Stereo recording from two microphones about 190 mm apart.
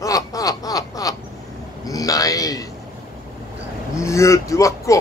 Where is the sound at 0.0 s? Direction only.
20° left (ahead or behind).